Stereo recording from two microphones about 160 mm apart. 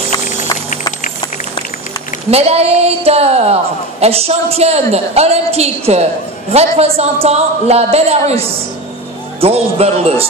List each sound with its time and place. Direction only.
2.3 s a man's voice: 40° right (ahead or behind)